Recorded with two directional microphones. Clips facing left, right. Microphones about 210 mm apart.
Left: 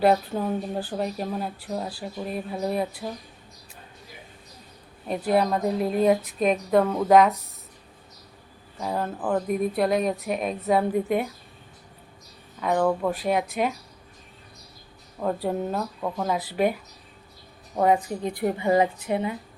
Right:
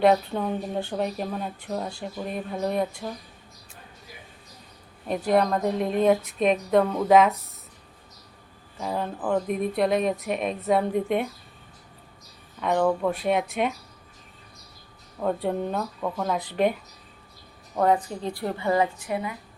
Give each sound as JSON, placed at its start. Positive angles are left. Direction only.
{"t": 0.0, "sound": "speech", "side_deg": 5}
{"t": 5.0, "sound": "speech", "side_deg": 0}
{"t": 8.8, "sound": "speech", "side_deg": 0}
{"t": 12.5, "sound": "speech", "side_deg": 0}
{"t": 15.2, "sound": "speech", "side_deg": 0}
{"t": 17.7, "sound": "a woman's voice", "side_deg": 10}